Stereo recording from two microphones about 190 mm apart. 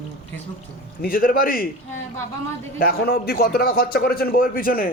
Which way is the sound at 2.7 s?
55° left (ahead or behind).